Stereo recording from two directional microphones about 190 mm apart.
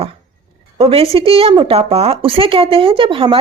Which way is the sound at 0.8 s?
30° right (ahead or behind).